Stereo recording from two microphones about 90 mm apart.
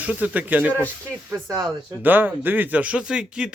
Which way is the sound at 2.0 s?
20° right (ahead or behind).